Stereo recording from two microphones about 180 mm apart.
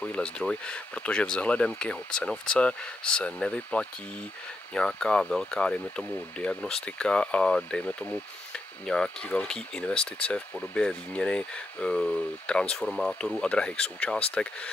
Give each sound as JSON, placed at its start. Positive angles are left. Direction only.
{"t": 0.0, "sound": "speech", "side_deg": 5}